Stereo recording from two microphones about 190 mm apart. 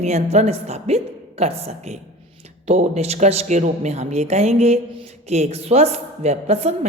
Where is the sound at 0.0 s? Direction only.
35° right (ahead or behind).